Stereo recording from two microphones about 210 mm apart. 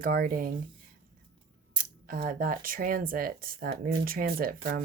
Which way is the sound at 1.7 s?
40° right (ahead or behind).